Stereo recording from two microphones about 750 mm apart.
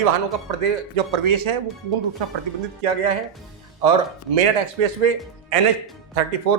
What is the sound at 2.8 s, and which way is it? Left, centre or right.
A man's voice, right.